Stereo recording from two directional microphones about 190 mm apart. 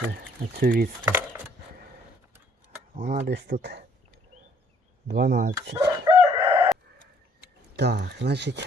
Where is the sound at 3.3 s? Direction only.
65° right (ahead or behind).